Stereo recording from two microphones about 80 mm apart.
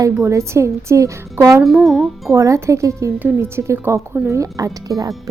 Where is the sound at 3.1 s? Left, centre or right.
Right.